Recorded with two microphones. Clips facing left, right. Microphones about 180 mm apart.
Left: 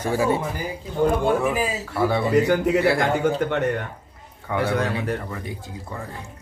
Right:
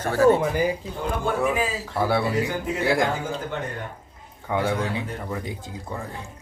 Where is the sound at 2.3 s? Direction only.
70° left (ahead or behind).